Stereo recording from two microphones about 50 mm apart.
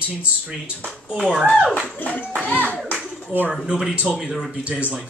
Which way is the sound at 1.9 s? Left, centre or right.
Left.